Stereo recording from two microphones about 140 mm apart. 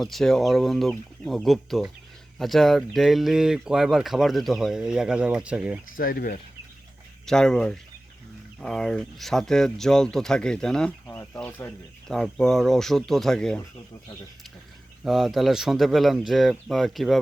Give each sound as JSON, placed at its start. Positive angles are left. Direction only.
{"t": 0.0, "sound": "speech", "side_deg": 0}
{"t": 6.0, "sound": "speech", "side_deg": 90}
{"t": 7.3, "sound": "speech", "side_deg": 5}
{"t": 12.0, "sound": "speech", "side_deg": 5}
{"t": 15.0, "sound": "speech", "side_deg": 0}